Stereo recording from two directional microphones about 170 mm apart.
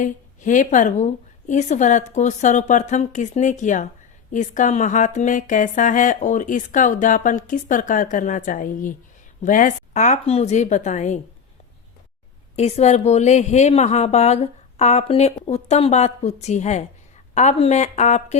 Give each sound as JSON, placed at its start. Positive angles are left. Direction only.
{"t": 0.0, "sound": "a woman's voice", "side_deg": 50}
{"t": 12.5, "sound": "a woman's voice", "side_deg": 40}